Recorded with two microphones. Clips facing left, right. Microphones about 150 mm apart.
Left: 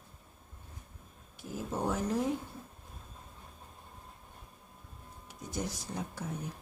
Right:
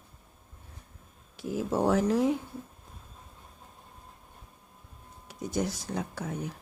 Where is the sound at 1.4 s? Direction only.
85° right.